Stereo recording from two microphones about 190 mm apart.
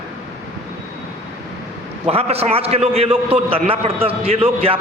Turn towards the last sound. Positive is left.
turn(degrees=-30)  # may be behind; listen again after turning